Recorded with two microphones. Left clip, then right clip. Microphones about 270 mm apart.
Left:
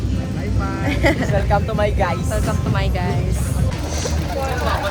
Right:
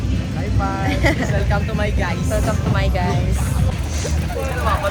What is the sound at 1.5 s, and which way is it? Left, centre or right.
Speech, left.